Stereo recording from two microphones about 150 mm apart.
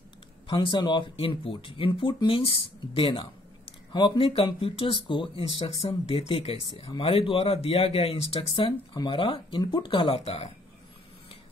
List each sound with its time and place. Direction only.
0.5 s speech: 35° left (ahead or behind)